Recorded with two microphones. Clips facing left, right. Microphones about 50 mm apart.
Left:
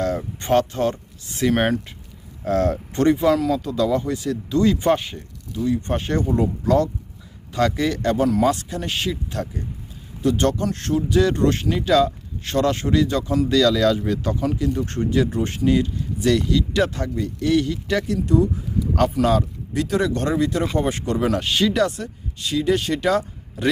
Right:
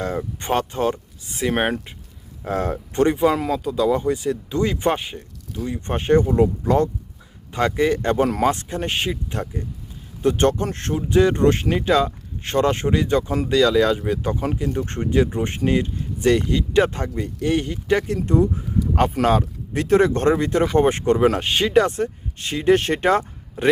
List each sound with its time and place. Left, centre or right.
0.0 s a sound: centre
0.7 s speech: centre
3.6 s speech: centre; by 13.5 s right
13.5 s speech: right
14.7 s speech: right